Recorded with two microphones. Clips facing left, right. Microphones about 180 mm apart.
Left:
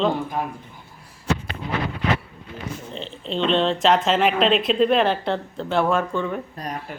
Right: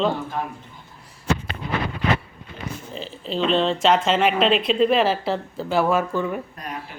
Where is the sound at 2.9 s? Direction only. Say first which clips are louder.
Right 2 dB; 5° right (ahead or behind).